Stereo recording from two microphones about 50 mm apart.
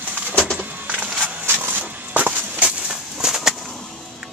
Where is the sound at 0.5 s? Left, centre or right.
Right.